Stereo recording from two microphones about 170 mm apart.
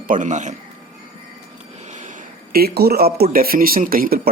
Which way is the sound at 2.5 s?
65° right (ahead or behind).